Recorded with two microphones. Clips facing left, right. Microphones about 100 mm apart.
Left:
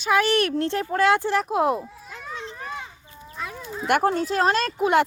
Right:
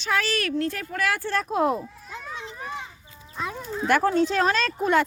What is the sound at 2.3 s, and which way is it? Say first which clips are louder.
Children playing: left 4 dB; 15° right (ahead or behind).